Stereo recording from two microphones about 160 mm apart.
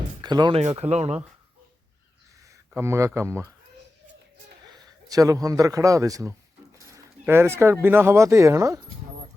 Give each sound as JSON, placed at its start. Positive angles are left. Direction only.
{"t": 0.2, "sound": "speech", "side_deg": -25}
{"t": 0.5, "sound": "speech", "side_deg": -40}
{"t": 2.7, "sound": "speech", "side_deg": -15}
{"t": 4.7, "sound": "a man's voice", "side_deg": -20}